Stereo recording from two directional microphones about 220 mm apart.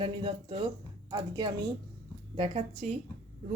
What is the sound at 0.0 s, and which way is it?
Speech, 25° right (ahead or behind).